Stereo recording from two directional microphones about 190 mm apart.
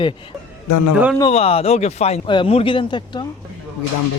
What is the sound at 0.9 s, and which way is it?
Speech, 5° right (ahead or behind).